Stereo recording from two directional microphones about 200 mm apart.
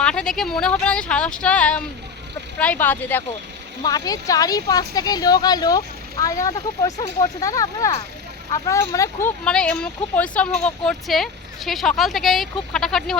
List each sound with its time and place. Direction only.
0.0 s speech: 5° left (ahead or behind)
9.4 s speech: 5° left (ahead or behind)